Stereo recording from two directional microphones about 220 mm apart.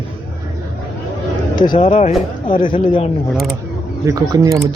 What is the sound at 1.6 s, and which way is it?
Speech, 35° left (ahead or behind).